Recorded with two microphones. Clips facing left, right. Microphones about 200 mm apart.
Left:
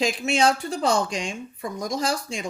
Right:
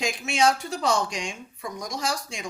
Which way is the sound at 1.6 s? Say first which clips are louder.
Left 5 dB; 55° left (ahead or behind).